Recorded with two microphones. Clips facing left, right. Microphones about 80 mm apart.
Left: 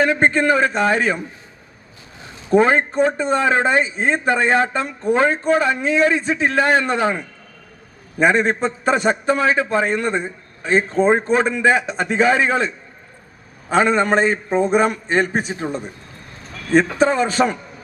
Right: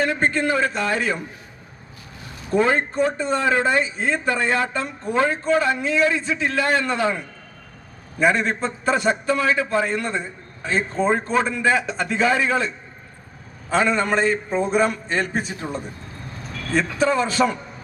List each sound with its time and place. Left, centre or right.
0.1 s speech: left
2.2 s a sound: left
2.9 s speech: left
8.2 s speech: left
11.0 s speech: left
17.0 s speech: left